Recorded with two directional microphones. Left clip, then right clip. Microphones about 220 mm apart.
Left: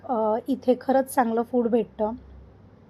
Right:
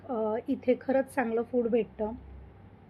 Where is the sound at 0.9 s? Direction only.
15° left (ahead or behind).